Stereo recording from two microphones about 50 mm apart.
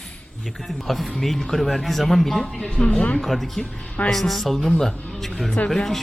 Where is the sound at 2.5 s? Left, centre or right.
Centre.